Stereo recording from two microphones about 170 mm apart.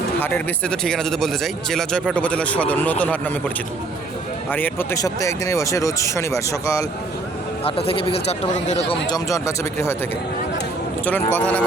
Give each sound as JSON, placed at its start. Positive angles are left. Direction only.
{"t": 0.2, "sound": "speech", "side_deg": 10}
{"t": 4.5, "sound": "speech", "side_deg": 10}
{"t": 7.6, "sound": "speech", "side_deg": 35}
{"t": 9.0, "sound": "speech", "side_deg": 20}
{"t": 11.0, "sound": "speech", "side_deg": 10}